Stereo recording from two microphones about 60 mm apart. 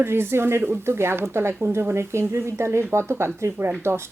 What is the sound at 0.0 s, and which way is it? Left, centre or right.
Speech, right.